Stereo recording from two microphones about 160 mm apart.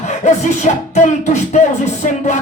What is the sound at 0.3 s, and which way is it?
Speech, 45° left (ahead or behind).